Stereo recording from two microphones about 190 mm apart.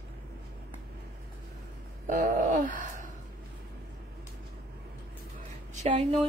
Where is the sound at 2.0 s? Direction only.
45° right (ahead or behind).